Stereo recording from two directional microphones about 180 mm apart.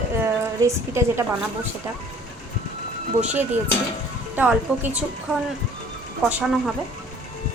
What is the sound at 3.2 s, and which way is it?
A woman's voice, 5° right (ahead or behind).